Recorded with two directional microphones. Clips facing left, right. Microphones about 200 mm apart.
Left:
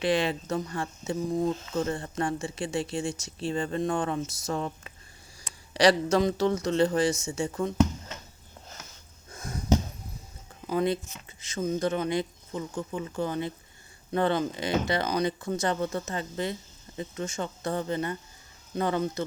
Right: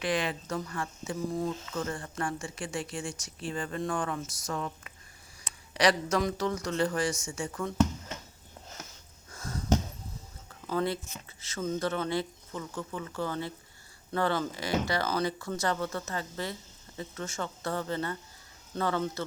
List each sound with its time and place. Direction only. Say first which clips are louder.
0.0 s speech: left 5 dB; 25° left (ahead or behind)
9.3 s a sound: left 2 dB; 15° left (ahead or behind)
10.5 s speech: left 4 dB; 15° left (ahead or behind)